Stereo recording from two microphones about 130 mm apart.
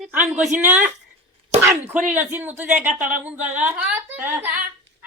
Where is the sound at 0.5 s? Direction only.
10° right (ahead or behind).